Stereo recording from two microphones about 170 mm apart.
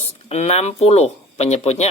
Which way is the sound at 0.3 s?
40° left (ahead or behind).